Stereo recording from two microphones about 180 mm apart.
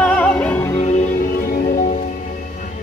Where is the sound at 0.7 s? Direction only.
40° left (ahead or behind).